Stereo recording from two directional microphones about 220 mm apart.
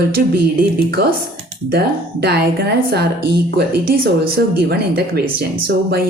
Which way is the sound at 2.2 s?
45° right (ahead or behind).